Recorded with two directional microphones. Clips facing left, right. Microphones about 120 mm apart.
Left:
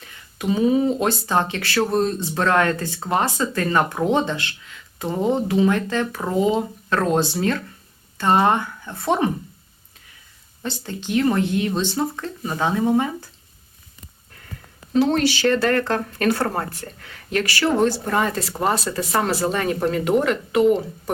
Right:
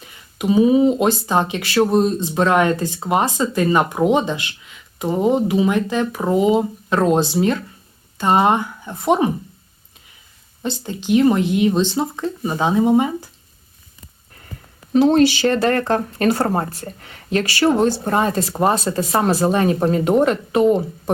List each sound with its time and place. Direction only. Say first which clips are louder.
0.0 s speech: right 3 dB; 15° right (ahead or behind)
10.6 s speech: right 4 dB; 15° right (ahead or behind)
14.9 s speech: right 5 dB; 20° right (ahead or behind)